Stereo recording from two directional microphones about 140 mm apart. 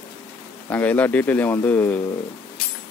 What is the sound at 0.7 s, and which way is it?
Speech, 10° left (ahead or behind).